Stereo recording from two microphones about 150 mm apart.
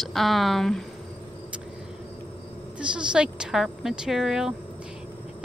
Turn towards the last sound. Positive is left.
turn(degrees=-5)  # may be behind; listen again after turning